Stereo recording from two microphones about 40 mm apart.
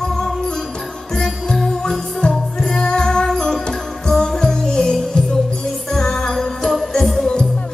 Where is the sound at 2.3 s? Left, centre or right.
Centre.